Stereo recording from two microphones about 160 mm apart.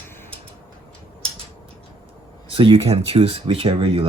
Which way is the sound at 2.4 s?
35° right (ahead or behind).